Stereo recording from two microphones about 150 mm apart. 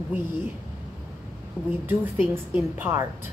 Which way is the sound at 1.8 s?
15° right (ahead or behind).